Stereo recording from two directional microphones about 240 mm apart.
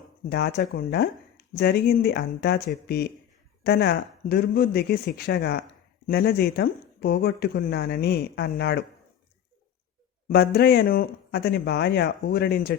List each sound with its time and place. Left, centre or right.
0.3 s speech: left
10.2 s speech: left